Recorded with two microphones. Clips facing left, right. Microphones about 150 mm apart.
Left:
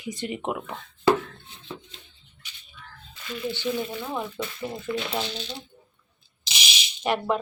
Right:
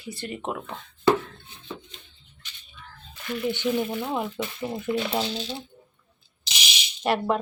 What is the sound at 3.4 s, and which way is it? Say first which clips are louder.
Speech: right 3 dB; 20° right (ahead or behind).